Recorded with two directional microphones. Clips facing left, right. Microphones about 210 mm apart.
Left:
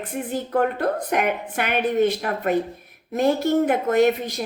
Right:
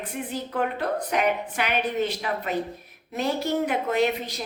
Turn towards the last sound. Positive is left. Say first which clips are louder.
# left 5 dB
turn(degrees=50)  # may be behind; listen again after turning